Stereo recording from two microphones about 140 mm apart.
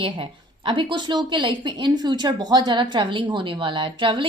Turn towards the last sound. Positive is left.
turn(degrees=-35)  # may be behind; listen again after turning